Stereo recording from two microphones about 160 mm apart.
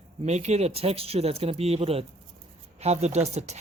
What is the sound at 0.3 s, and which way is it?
Speech, 45° right (ahead or behind).